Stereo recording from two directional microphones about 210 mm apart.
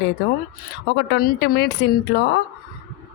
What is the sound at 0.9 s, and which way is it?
A woman's voice, 50° left (ahead or behind).